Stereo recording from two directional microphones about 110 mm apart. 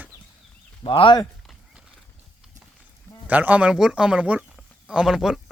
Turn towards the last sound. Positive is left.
turn(degrees=-5)  # may be behind; listen again after turning